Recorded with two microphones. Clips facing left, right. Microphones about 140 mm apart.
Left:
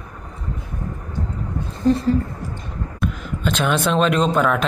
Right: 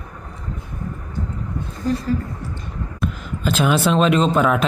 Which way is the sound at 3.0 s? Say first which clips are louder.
Even; 5° right (ahead or behind).